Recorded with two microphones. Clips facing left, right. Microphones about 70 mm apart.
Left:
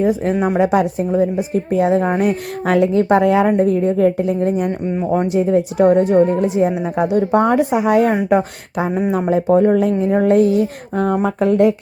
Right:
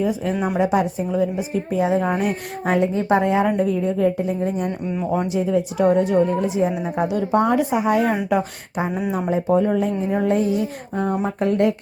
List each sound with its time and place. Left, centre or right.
0.0 s a woman's voice: left
0.3 s a child's voice: left
0.6 s a woman's voice: left
2.0 s a child's voice: left
2.6 s a woman's voice: left
3.4 s a woman's voice: left
6.2 s speech: left
9.5 s speech: left